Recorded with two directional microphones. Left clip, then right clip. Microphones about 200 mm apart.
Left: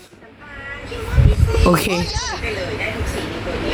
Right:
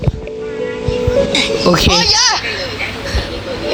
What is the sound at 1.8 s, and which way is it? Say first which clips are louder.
Speech: right 11 dB; 45° right (ahead or behind).